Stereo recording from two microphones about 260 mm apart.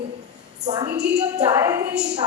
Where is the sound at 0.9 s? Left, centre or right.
Centre.